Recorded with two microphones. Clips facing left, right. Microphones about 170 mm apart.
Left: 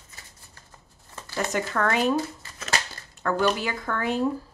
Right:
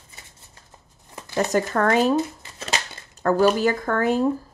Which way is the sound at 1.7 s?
40° right (ahead or behind).